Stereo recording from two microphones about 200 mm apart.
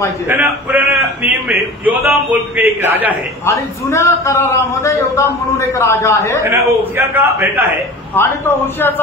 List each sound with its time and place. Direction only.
0.3 s a man's voice: 10° right (ahead or behind)
3.4 s a man's voice: 15° left (ahead or behind)
6.4 s a man's voice: 15° right (ahead or behind)
8.1 s a man's voice: 10° left (ahead or behind)